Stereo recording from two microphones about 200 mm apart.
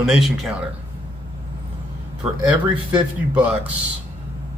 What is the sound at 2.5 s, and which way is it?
Speech, 5° right (ahead or behind).